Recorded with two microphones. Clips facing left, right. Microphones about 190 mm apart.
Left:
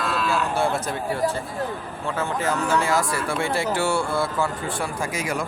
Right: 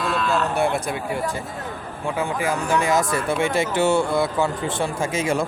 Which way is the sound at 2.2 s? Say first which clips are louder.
Even; 15° right (ahead or behind).